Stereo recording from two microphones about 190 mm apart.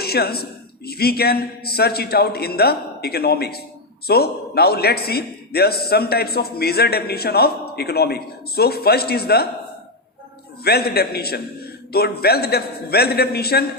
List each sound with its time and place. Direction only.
0.0 s a man's voice: 55° left (ahead or behind)
10.6 s a man's voice: 55° left (ahead or behind)